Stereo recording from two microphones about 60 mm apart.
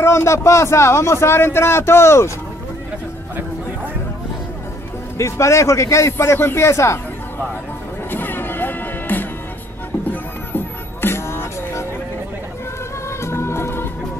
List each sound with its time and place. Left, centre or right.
0.0 s a man's voice: left
5.1 s a man's voice: left
8.1 s music: left
13.2 s music: left